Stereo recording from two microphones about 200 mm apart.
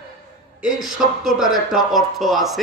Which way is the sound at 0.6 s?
5° right (ahead or behind).